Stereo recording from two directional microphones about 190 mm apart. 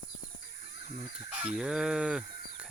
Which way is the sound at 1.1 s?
5° right (ahead or behind).